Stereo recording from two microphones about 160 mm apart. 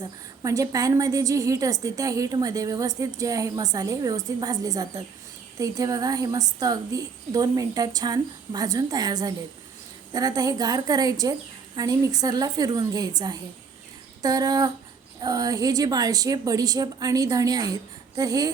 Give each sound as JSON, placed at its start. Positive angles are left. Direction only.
{"t": 0.4, "sound": "a woman's voice", "side_deg": -20}